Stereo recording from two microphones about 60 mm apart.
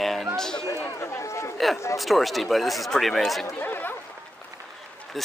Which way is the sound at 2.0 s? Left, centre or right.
Centre.